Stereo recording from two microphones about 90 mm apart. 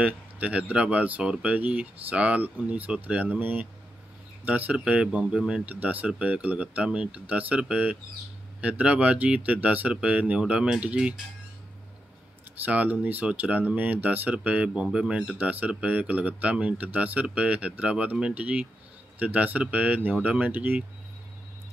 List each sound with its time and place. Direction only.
0.0 s speech: 15° right (ahead or behind)
12.6 s speech: 20° right (ahead or behind)